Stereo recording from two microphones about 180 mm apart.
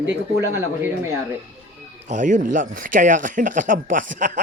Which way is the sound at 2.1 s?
45° right (ahead or behind).